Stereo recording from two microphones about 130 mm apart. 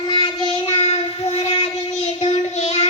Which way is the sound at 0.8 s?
55° left (ahead or behind).